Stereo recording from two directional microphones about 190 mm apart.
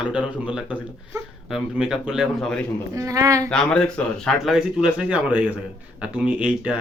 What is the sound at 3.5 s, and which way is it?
Speech, 5° left (ahead or behind).